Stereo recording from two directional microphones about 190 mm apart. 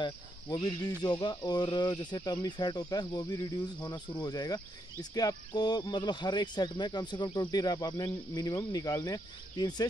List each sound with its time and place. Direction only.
0.0 s speech: 25° left (ahead or behind)